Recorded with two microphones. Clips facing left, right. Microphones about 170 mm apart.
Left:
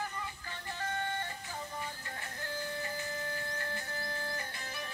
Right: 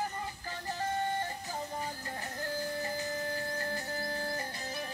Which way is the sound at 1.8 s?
35° right (ahead or behind).